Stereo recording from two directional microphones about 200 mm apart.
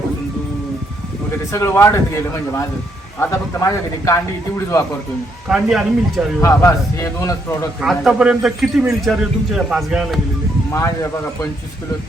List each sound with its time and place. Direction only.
1.5 s speech: 15° left (ahead or behind)
3.2 s speech: 15° left (ahead or behind)
5.5 s speech: centre (ahead or behind)
6.4 s speech: 15° left (ahead or behind)
7.8 s speech: centre (ahead or behind)
10.7 s speech: 15° left (ahead or behind)